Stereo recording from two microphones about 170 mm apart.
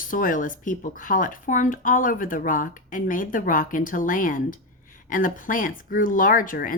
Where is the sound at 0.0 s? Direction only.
55° left (ahead or behind).